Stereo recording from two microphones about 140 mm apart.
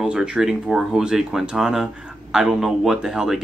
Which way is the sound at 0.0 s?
5° right (ahead or behind).